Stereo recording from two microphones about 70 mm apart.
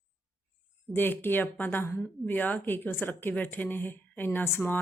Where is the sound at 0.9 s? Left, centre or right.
Left.